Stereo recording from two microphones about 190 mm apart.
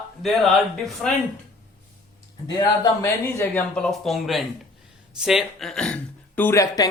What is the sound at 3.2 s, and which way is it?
A woman's voice, 10° left (ahead or behind).